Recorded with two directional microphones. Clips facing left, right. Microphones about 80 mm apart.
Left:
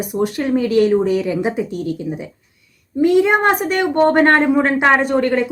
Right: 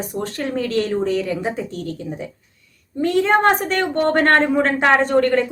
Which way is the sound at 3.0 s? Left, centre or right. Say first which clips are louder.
Left 3 dB; centre.